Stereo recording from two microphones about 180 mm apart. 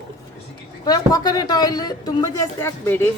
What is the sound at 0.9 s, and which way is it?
Speech, 20° left (ahead or behind).